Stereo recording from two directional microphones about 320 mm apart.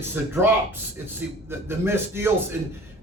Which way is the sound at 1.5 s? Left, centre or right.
Centre.